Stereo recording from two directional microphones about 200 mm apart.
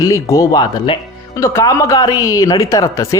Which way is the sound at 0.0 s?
15° left (ahead or behind).